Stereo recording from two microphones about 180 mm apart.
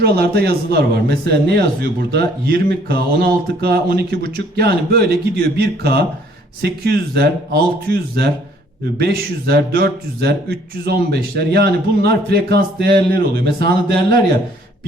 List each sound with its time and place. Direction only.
0.0 s a man's voice: 60° right (ahead or behind)